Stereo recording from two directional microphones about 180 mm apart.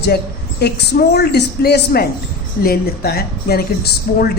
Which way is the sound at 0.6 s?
60° left (ahead or behind).